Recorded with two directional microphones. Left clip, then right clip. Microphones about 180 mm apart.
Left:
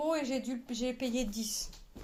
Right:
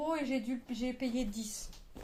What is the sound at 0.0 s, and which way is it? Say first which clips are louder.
A woman's voice: left 2 dB; 50° left (ahead or behind).